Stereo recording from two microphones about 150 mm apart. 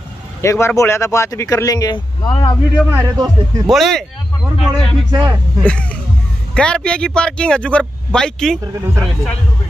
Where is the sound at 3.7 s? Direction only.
Centre (ahead or behind).